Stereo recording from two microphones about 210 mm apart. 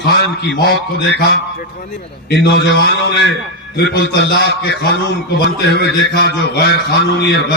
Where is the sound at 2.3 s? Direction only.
55° left (ahead or behind).